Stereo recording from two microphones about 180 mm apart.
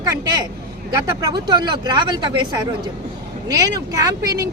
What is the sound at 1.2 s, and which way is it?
Speech, 20° right (ahead or behind).